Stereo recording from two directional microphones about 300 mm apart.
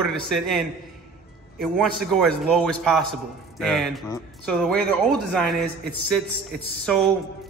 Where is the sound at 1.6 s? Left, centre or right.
Centre.